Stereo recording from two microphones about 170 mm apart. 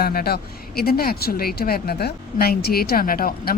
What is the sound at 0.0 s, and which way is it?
Speech, 65° left (ahead or behind).